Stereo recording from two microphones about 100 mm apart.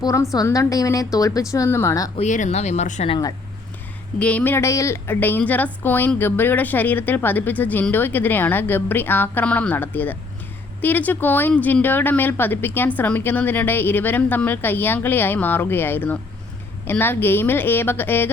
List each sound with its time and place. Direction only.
0.0 s a woman's voice: 35° left (ahead or behind)
2.1 s speech: 90° left
4.2 s speech: 15° left (ahead or behind)